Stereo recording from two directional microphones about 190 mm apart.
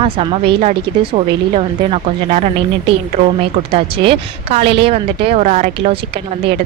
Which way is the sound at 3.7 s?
30° right (ahead or behind).